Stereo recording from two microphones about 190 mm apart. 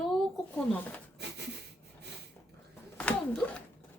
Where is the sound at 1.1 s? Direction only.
60° right (ahead or behind).